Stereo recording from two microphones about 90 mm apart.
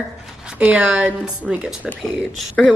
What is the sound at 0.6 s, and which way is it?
A woman's voice, 15° right (ahead or behind).